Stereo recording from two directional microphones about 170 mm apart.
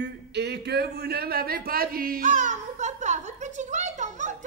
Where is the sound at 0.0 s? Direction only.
80° right.